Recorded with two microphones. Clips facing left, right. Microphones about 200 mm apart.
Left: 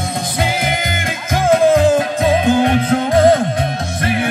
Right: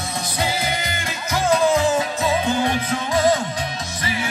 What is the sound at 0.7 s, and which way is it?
Music, 50° left (ahead or behind).